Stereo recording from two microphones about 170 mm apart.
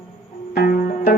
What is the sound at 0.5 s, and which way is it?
Music, 60° left (ahead or behind).